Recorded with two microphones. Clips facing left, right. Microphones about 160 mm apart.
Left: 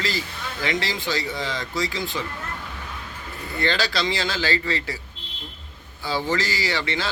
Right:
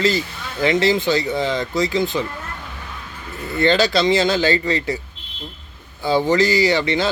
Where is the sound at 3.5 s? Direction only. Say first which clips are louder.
Right 8 dB; 20° right (ahead or behind).